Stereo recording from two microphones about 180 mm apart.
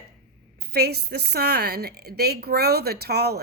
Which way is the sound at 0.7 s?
60° right (ahead or behind).